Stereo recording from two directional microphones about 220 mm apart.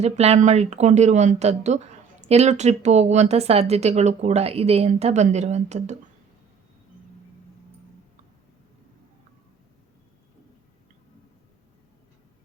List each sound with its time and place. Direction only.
0.0 s speech: 30° right (ahead or behind)